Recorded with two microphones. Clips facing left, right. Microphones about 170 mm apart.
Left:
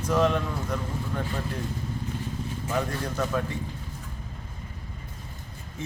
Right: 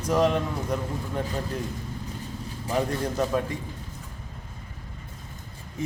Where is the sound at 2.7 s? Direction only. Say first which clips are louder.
Right 3 dB; 35° right (ahead or behind).